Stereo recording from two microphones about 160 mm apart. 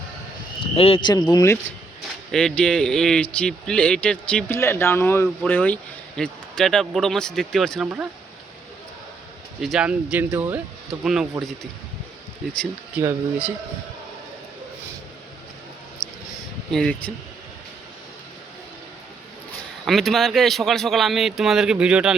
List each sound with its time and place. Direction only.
0.6 s speech: 35° left (ahead or behind)
1.1 s speech: 25° left (ahead or behind)
2.3 s speech: 5° left (ahead or behind)
9.6 s speech: 5° right (ahead or behind)
13.0 s speech: 15° right (ahead or behind)
16.0 s a sound: 10° left (ahead or behind)
16.7 s speech: 5° left (ahead or behind)
19.8 s speech: centre (ahead or behind)